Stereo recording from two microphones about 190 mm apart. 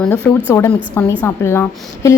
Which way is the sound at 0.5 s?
10° left (ahead or behind).